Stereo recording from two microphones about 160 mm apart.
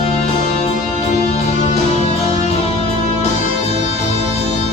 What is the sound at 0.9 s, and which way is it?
Music, 40° left (ahead or behind).